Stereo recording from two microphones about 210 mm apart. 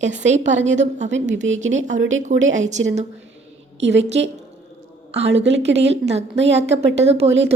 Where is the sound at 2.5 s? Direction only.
35° right (ahead or behind).